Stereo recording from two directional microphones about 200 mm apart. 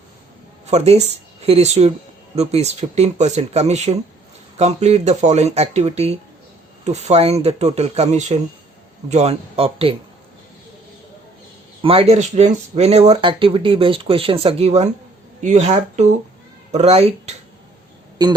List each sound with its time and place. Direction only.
0.7 s speech: 35° right (ahead or behind)
11.8 s speech: 30° right (ahead or behind)
18.2 s speech: 20° right (ahead or behind)